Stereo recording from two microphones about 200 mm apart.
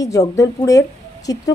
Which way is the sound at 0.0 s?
15° left (ahead or behind).